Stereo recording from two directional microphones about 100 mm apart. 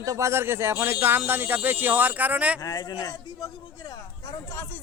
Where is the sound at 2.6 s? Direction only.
40° left (ahead or behind).